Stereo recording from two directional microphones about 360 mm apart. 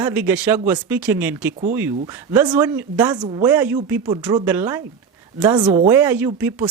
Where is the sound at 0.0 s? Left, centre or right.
Centre.